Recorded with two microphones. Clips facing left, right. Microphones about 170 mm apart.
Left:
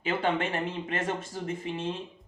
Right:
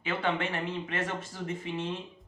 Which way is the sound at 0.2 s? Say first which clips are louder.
Left 3 dB; 40° left (ahead or behind).